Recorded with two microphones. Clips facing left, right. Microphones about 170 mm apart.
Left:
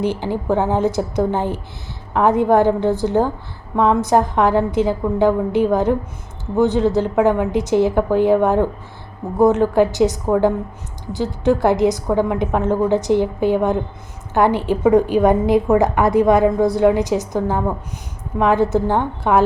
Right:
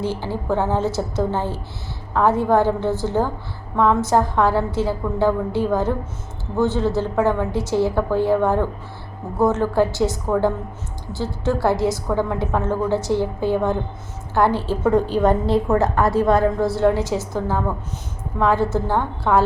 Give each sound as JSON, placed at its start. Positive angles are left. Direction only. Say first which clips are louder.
{"t": 0.0, "sound": "a woman's voice", "louder": "left 4 dB", "side_deg": 15}